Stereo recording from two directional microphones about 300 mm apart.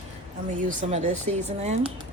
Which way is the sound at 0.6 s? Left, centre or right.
Right.